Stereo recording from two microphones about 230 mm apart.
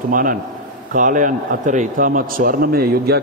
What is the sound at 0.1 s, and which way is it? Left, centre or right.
A man's voice, right.